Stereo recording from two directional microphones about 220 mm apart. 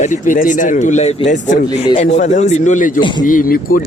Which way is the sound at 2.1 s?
35° left (ahead or behind).